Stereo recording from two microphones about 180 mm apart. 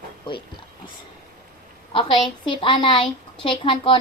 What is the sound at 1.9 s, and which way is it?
A woman's voice, 30° left (ahead or behind).